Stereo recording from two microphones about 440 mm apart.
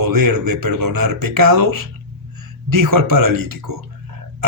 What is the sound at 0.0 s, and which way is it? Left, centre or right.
A man's voice, right.